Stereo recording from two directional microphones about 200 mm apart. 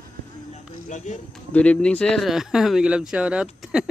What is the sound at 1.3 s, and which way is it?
Speech, 5° left (ahead or behind).